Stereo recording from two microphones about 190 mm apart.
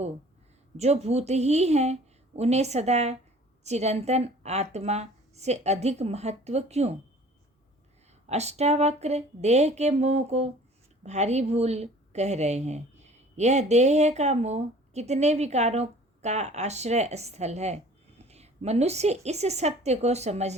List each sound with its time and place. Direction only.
0.8 s speech: 35° right (ahead or behind)
8.3 s speech: 35° right (ahead or behind)